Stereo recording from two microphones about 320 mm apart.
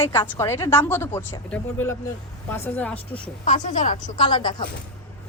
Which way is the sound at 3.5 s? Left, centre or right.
Left.